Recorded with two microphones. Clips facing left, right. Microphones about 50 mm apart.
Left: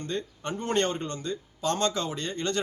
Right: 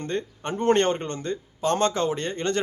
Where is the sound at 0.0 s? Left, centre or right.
Right.